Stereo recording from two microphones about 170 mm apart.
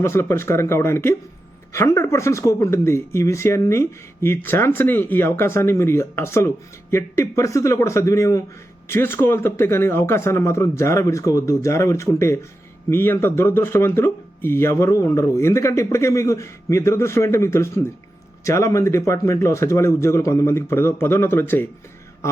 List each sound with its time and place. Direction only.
0.0 s speech: 15° left (ahead or behind)